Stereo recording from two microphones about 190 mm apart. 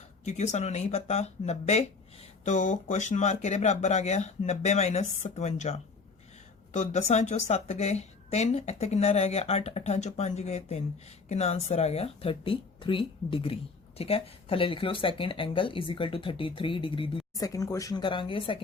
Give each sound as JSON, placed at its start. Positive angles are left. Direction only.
{"t": 0.3, "sound": "a woman's voice", "side_deg": 35}